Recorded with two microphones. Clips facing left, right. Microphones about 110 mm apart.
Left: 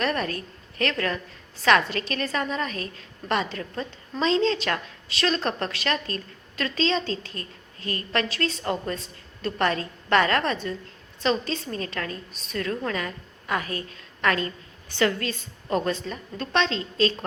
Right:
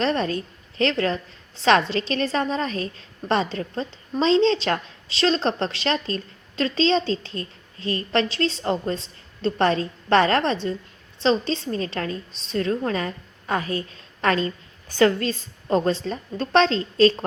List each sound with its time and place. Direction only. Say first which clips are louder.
0.0 s a woman's voice: right 4 dB; 25° right (ahead or behind)